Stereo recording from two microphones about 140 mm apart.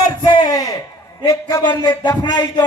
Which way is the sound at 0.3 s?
30° left (ahead or behind).